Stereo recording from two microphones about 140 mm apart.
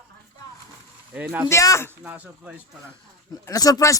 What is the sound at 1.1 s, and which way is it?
Speech, 10° right (ahead or behind).